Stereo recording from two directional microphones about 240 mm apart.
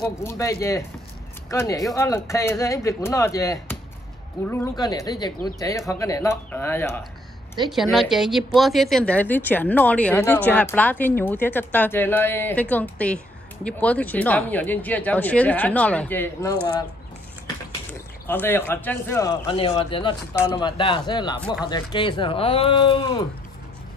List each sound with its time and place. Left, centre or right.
0.2 s a woman's voice: centre
18.2 s speech: centre
19.7 s speech: left